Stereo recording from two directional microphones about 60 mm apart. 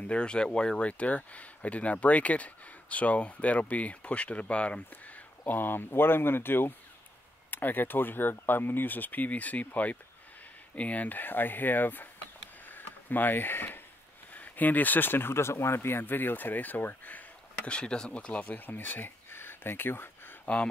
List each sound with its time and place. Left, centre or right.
0.0 s speech: centre
12.6 s a sound: left
14.3 s speech: left
17.6 s speech: centre; by 20.3 s left